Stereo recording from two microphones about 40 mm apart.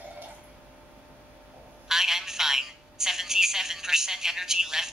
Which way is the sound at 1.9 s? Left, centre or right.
Centre.